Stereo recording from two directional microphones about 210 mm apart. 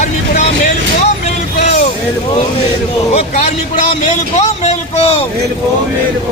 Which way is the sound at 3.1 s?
30° left (ahead or behind).